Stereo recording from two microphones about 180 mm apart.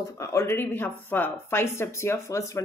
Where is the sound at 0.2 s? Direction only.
15° left (ahead or behind).